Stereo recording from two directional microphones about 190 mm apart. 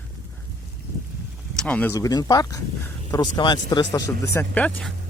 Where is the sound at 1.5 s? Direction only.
5° left (ahead or behind).